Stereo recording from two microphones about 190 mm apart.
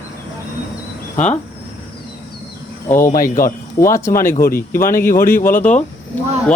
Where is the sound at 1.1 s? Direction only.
40° left (ahead or behind).